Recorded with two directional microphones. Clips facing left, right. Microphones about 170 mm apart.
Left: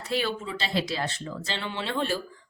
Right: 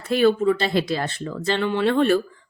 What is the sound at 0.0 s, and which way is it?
Speech, 50° right (ahead or behind).